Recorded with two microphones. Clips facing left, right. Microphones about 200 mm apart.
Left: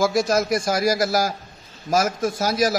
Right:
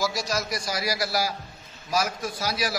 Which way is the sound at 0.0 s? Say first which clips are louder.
Left 9 dB; 50° left (ahead or behind).